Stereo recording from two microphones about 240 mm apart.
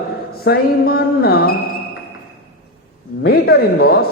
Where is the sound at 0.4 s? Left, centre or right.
Left.